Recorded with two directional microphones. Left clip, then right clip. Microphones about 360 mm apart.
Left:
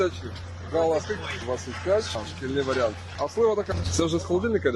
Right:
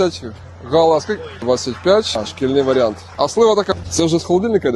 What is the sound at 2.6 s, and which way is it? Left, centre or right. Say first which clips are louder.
Speech: right 10 dB; right.